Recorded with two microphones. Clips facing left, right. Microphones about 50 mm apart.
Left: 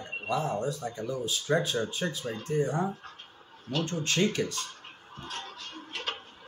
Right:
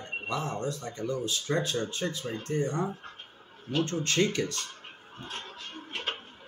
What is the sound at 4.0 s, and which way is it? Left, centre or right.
Speech, centre.